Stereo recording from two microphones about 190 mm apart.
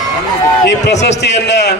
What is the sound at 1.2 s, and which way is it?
Speech, 65° left (ahead or behind).